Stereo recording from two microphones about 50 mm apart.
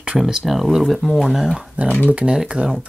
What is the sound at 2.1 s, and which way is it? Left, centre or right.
Speech, right.